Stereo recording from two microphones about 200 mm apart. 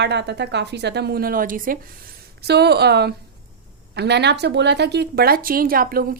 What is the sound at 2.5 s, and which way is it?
A woman's voice, 55° right (ahead or behind).